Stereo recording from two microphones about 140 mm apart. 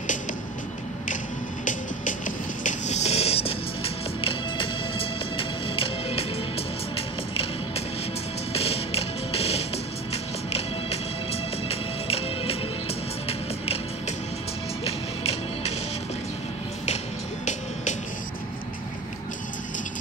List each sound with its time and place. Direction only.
1.6 s music: 65° left (ahead or behind); by 13.7 s 45° left (ahead or behind)
14.9 s music: 45° left (ahead or behind)